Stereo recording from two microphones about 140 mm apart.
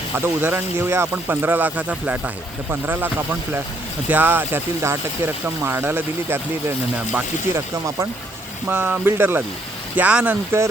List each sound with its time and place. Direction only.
0.2 s speech: 15° right (ahead or behind)
8.6 s speech: 15° right (ahead or behind)